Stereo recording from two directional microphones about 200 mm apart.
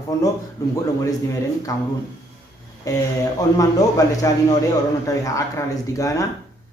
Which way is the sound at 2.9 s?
15° left (ahead or behind).